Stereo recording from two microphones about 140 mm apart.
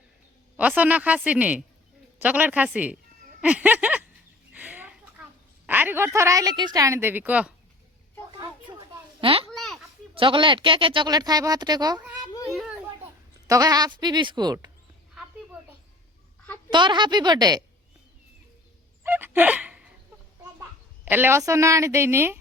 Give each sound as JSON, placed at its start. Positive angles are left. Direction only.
{"t": 0.8, "sound": "a woman's voice", "side_deg": -10}
{"t": 4.5, "sound": "chicken", "side_deg": -10}
{"t": 5.6, "sound": "a woman's voice", "side_deg": -15}
{"t": 8.3, "sound": "a sound", "side_deg": -35}
{"t": 9.5, "sound": "a sound", "side_deg": 0}
{"t": 10.2, "sound": "speech", "side_deg": -35}
{"t": 12.5, "sound": "children playing", "side_deg": 0}
{"t": 13.5, "sound": "a woman's voice", "side_deg": -25}
{"t": 15.5, "sound": "a sound", "side_deg": -5}
{"t": 16.6, "sound": "speech", "side_deg": -35}
{"t": 19.0, "sound": "fowl", "side_deg": -15}
{"t": 20.4, "sound": "a child's voice", "side_deg": -15}